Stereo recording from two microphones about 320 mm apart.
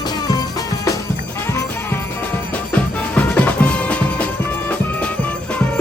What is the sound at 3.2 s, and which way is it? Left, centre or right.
Music, centre.